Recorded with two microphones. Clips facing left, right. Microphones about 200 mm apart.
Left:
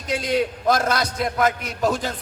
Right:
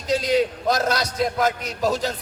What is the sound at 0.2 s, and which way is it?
A man's voice, 50° left (ahead or behind).